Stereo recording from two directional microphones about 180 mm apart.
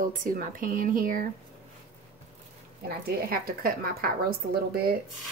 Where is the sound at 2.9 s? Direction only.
55° right (ahead or behind).